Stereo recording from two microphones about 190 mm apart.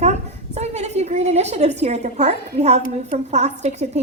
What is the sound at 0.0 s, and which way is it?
A woman's voice, 35° right (ahead or behind).